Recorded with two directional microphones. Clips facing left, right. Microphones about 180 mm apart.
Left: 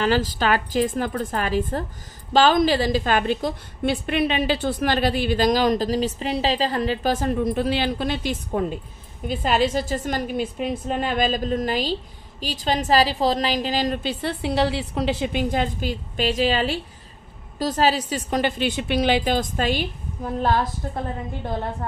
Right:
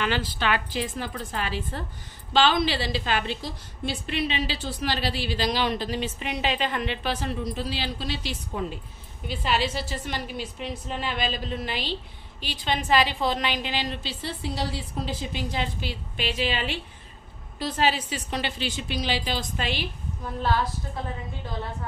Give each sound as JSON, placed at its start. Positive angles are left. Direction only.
{"t": 0.0, "sound": "a woman's voice", "side_deg": 40}
{"t": 15.5, "sound": "a woman's voice", "side_deg": 45}